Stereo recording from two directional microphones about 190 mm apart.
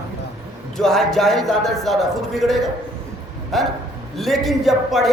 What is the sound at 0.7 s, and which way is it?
A man's voice, centre (ahead or behind).